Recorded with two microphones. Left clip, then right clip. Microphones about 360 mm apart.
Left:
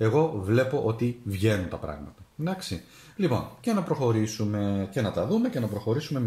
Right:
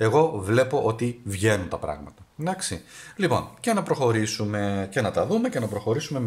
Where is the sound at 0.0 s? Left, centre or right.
Right.